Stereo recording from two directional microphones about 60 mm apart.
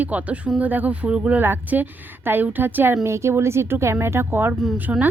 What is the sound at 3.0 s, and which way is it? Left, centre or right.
A woman's voice, right.